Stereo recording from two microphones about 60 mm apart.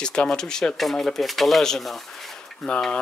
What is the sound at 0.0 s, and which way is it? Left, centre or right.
Speech, centre.